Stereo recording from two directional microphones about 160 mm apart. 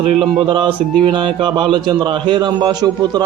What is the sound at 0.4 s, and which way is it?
A man's voice, 30° right (ahead or behind).